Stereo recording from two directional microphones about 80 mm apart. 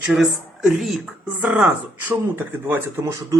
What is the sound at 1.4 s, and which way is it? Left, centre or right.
Speech, right.